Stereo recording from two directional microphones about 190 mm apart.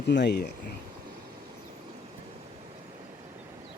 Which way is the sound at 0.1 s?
65° left (ahead or behind).